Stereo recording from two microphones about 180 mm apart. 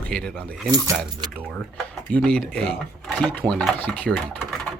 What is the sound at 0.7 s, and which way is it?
Speech, 15° right (ahead or behind).